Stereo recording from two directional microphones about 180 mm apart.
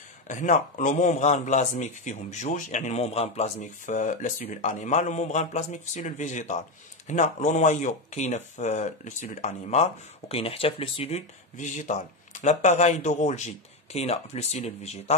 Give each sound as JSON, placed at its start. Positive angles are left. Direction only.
{"t": 0.3, "sound": "speech", "side_deg": 45}